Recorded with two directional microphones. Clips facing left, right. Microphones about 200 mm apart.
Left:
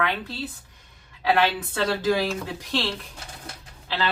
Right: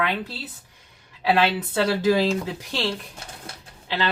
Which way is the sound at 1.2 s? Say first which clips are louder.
Right 1 dB; 15° right (ahead or behind).